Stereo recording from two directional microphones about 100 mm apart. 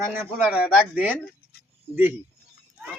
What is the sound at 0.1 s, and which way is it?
Speech, 20° right (ahead or behind).